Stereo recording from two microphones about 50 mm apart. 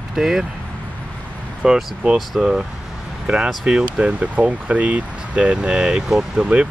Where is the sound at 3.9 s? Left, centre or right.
Right.